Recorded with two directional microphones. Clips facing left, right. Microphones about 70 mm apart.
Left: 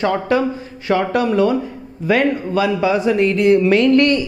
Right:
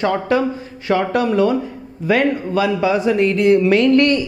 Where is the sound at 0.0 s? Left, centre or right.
Centre.